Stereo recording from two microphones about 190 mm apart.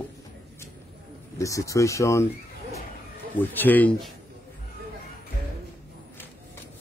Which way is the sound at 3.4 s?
10° left (ahead or behind).